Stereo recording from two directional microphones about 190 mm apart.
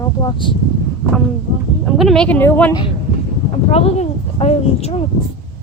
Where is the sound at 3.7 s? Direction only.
30° left (ahead or behind).